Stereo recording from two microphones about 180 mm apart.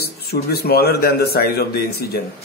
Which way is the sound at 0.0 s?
60° left (ahead or behind).